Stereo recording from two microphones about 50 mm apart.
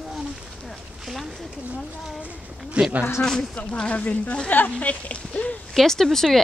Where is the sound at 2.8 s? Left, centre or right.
Right.